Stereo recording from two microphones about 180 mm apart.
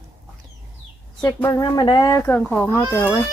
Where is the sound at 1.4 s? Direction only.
20° left (ahead or behind).